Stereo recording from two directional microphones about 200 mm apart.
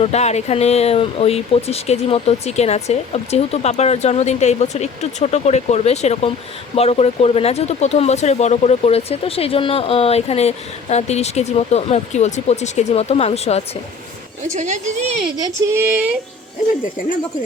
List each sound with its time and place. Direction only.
0.0 s speech: 35° left (ahead or behind)
14.4 s speech: 35° right (ahead or behind)
15.4 s female singing: 15° right (ahead or behind)